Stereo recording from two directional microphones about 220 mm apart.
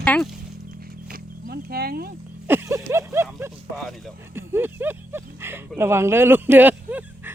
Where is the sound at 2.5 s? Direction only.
10° right (ahead or behind).